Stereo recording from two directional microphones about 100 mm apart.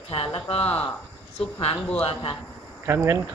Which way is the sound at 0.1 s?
70° left (ahead or behind).